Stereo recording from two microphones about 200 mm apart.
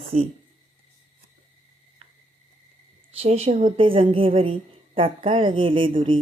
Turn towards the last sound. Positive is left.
turn(degrees=-25)  # may be behind; listen again after turning